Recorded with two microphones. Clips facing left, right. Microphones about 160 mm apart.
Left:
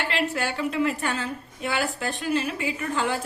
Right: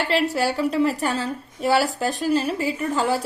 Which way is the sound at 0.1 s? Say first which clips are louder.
Right 6 dB; 35° right (ahead or behind).